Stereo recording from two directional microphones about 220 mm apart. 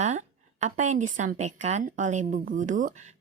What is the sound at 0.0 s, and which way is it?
A woman's voice, 30° right (ahead or behind).